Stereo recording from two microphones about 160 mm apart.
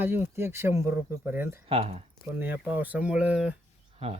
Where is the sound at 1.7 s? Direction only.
40° right (ahead or behind).